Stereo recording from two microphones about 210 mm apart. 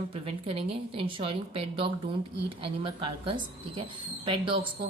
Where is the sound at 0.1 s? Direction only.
25° right (ahead or behind).